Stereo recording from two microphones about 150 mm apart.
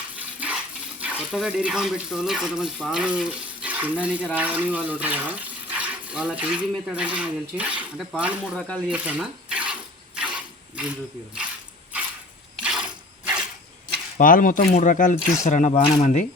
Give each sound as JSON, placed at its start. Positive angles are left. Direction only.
{"t": 0.2, "sound": "speech", "side_deg": -10}
{"t": 8.5, "sound": "speech", "side_deg": 5}
{"t": 8.9, "sound": "speech", "side_deg": -10}
{"t": 10.2, "sound": "a sound", "side_deg": -10}
{"t": 12.6, "sound": "a sound", "side_deg": -5}
{"t": 14.2, "sound": "speech", "side_deg": 65}